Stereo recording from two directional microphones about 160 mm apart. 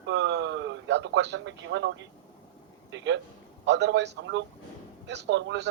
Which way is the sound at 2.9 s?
90° right.